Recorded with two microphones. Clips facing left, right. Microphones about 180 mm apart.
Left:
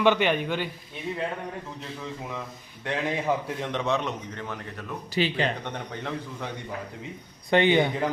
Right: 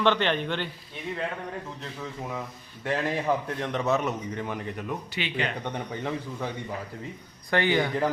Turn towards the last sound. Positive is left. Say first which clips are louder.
# left 4 dB
turn(degrees=25)  # may be behind; listen again after turning